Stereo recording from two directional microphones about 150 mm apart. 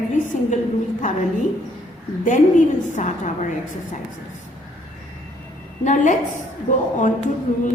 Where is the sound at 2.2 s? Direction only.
55° left (ahead or behind).